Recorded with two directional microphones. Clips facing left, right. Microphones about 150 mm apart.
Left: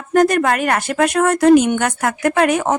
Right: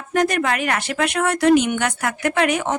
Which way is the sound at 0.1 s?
45° left (ahead or behind).